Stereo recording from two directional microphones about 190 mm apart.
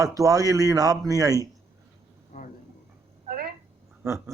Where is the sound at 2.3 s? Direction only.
40° left (ahead or behind).